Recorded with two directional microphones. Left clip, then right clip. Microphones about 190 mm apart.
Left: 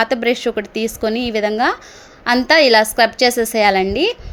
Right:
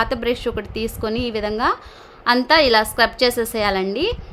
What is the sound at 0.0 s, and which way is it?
A woman's voice, 15° left (ahead or behind).